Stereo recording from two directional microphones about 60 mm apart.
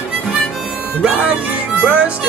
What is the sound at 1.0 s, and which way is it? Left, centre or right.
Music, right.